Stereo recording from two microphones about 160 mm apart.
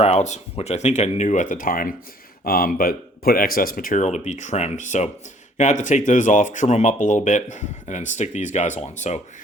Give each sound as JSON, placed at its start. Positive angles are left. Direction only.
{"t": 0.0, "sound": "speech", "side_deg": 45}
{"t": 4.0, "sound": "speech", "side_deg": 45}